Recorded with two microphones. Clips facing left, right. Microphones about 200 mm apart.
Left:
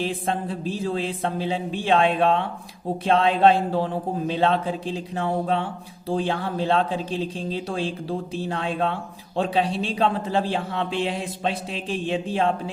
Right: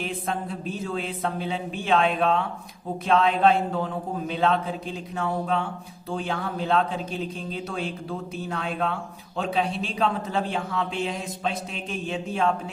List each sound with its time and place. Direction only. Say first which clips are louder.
0.0 s a man's voice: left 4 dB; 30° left (ahead or behind)